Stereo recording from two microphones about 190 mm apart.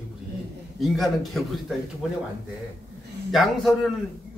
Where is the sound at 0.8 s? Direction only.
Centre (ahead or behind).